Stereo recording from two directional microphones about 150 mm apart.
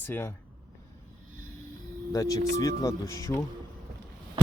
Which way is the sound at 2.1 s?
25° left (ahead or behind).